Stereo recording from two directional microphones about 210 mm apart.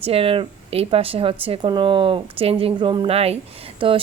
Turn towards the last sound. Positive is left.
turn(degrees=-25)  # may be behind; listen again after turning